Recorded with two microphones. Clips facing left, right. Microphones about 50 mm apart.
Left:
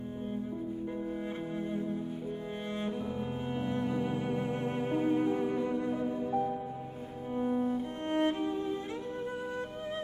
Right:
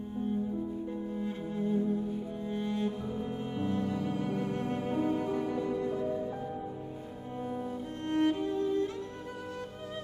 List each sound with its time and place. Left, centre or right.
3.5 s cello: left
7.3 s music: left